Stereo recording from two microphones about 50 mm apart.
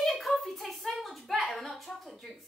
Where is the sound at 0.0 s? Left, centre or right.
Centre.